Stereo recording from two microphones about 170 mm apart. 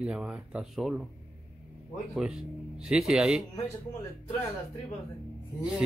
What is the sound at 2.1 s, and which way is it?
Speech, 5° right (ahead or behind).